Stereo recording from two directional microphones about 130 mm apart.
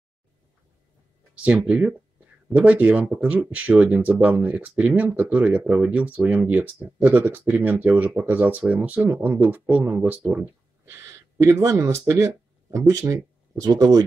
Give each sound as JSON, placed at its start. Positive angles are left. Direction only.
{"t": 1.4, "sound": "speech", "side_deg": -10}